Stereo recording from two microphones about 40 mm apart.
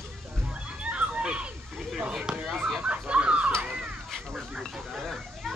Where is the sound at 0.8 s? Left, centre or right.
Right.